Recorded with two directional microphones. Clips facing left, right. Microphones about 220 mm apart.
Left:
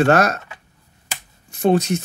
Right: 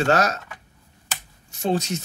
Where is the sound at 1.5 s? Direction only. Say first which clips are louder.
Left 7 dB; 55° left (ahead or behind).